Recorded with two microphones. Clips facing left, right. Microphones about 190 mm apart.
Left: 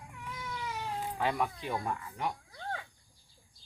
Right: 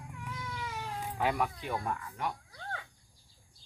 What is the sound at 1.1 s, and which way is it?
Speech, 10° right (ahead or behind).